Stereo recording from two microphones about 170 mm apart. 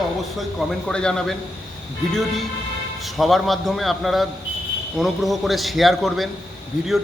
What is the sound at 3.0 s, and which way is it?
A man's voice, centre (ahead or behind).